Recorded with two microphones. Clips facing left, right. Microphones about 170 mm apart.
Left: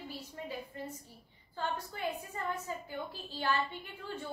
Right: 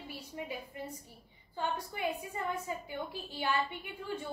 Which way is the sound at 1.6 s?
15° right (ahead or behind).